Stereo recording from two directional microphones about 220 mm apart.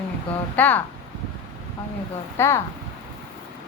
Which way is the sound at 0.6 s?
5° left (ahead or behind).